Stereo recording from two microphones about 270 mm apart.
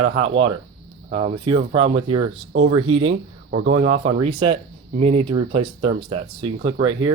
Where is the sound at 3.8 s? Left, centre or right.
Right.